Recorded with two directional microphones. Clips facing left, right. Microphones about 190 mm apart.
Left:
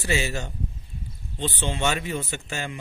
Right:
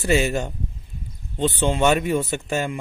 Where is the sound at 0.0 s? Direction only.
50° right (ahead or behind).